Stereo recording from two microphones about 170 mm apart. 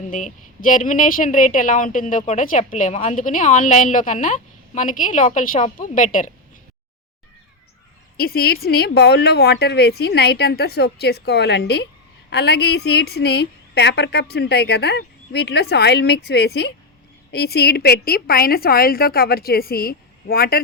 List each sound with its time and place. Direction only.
0.1 s a woman's voice: 50° left (ahead or behind)
8.1 s a woman's voice: 65° left (ahead or behind)